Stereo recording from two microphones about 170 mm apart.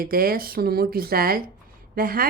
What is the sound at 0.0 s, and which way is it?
Speech, 60° right (ahead or behind).